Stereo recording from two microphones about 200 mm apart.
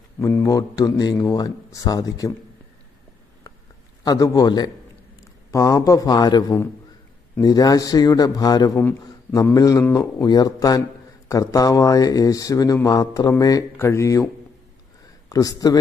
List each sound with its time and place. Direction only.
0.2 s a man's voice: 15° left (ahead or behind)
4.0 s a man's voice: 20° left (ahead or behind)